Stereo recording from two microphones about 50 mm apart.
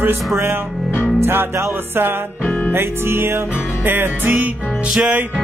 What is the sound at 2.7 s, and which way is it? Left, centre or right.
Music, right.